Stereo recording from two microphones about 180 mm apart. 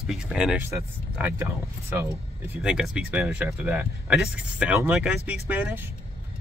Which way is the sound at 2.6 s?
5° right (ahead or behind).